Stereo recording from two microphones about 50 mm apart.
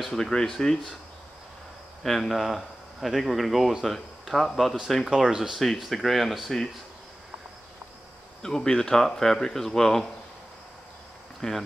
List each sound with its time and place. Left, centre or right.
0.0 s speech: centre
2.0 s speech: centre
5.0 s speech: centre
5.9 s speech: centre
8.4 s speech: centre
11.4 s speech: left